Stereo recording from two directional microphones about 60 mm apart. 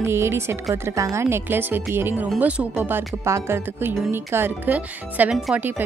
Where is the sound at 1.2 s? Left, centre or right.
Right.